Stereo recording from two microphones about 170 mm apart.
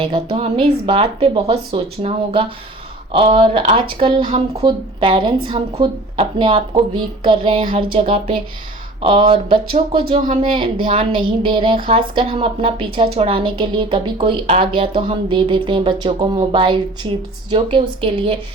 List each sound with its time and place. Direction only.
0.0 s a woman's voice: 35° right (ahead or behind)